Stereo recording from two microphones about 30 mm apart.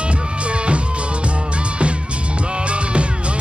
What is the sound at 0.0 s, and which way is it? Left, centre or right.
Music, right.